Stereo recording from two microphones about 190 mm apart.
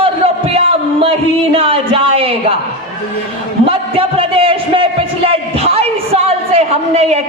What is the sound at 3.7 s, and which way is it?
A man's voice, 30° right (ahead or behind).